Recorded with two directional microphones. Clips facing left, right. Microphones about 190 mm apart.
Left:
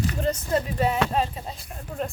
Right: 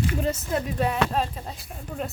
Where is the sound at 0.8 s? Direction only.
5° left (ahead or behind).